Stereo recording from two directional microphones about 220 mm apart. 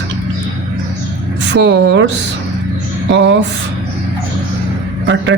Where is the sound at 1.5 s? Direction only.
50° right (ahead or behind).